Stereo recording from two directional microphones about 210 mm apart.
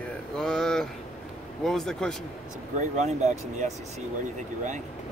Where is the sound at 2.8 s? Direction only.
35° right (ahead or behind).